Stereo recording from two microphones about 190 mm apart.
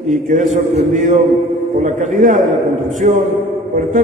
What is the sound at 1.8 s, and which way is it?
Speech, 40° right (ahead or behind).